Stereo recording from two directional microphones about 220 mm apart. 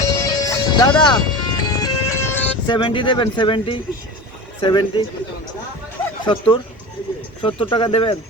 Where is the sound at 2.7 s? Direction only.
20° left (ahead or behind).